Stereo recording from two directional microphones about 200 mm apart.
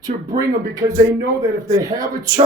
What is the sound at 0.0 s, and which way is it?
Speech, 15° right (ahead or behind).